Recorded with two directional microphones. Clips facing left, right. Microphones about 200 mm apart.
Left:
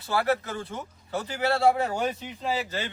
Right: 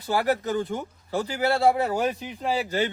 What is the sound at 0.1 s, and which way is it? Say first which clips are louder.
Speech: right 2 dB; 15° right (ahead or behind).